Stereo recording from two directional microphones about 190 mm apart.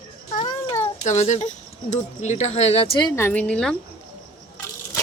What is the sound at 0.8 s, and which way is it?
Speech, 40° left (ahead or behind).